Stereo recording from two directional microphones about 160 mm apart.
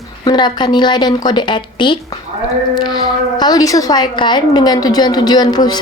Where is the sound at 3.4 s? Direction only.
25° left (ahead or behind).